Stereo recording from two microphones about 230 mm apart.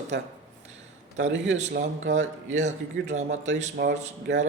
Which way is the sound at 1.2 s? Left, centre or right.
Right.